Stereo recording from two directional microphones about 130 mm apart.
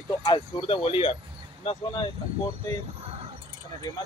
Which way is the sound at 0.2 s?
40° left (ahead or behind).